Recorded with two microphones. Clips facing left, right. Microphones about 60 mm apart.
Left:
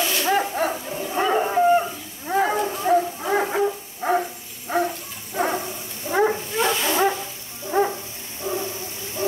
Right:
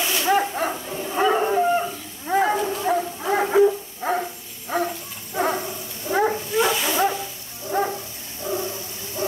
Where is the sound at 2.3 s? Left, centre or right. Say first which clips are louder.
Right 1 dB; centre.